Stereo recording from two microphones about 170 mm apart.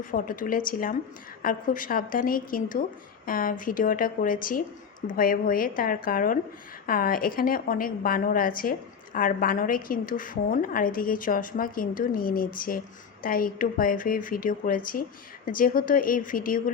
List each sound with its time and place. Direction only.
0.0 s a woman's voice: 55° left (ahead or behind)